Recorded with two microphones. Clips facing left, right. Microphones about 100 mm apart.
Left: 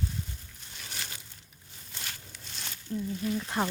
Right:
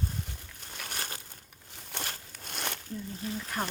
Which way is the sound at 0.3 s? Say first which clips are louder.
Right 2 dB; 60° right (ahead or behind).